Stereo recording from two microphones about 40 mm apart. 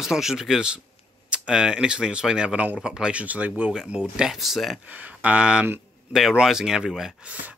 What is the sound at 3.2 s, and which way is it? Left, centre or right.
Speech, right.